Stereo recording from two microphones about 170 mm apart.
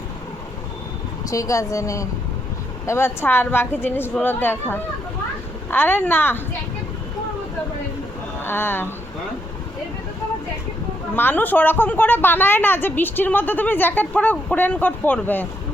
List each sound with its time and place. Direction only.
1.3 s a woman's voice: 20° left (ahead or behind)
8.4 s speech: 15° left (ahead or behind)
11.1 s a woman's voice: 10° left (ahead or behind)